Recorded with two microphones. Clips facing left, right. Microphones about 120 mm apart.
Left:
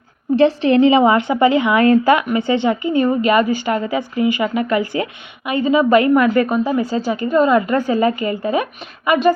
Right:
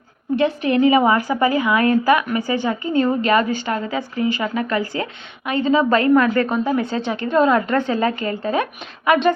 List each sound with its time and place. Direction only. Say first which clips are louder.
0.3 s a woman's voice: left 5 dB; 30° left (ahead or behind); by 9.3 s 5° left (ahead or behind)